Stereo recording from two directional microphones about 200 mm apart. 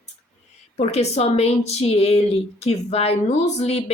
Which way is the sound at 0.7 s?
35° left (ahead or behind).